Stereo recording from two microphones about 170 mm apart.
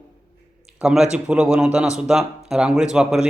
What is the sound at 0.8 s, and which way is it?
Speech, 5° right (ahead or behind).